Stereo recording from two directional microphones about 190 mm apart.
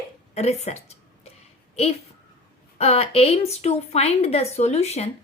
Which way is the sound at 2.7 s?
35° left (ahead or behind).